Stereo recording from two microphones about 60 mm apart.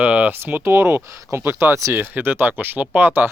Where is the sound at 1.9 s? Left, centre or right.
Right.